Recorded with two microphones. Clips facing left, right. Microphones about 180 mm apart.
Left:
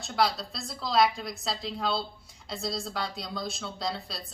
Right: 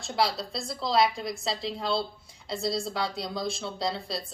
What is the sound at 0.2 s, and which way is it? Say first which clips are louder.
Speech: even; centre (ahead or behind).